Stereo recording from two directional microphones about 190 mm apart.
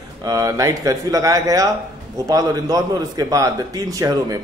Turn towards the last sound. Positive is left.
turn(degrees=-15)  # may be behind; listen again after turning